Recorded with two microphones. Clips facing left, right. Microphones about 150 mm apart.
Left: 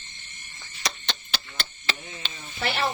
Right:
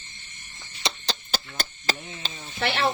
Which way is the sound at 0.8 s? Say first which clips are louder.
Right 2 dB; 25° right (ahead or behind).